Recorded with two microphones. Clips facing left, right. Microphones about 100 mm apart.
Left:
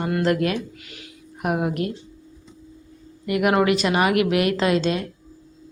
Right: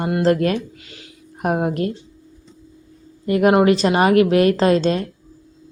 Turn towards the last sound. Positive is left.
turn(degrees=-40)  # may be behind; listen again after turning